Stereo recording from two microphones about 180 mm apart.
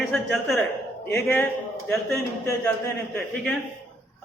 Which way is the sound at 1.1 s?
10° left (ahead or behind).